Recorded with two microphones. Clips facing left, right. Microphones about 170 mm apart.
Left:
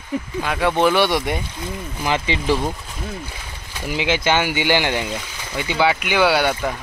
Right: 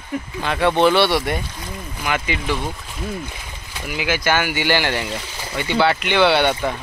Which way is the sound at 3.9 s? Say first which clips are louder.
Left 1 dB; 25° left (ahead or behind).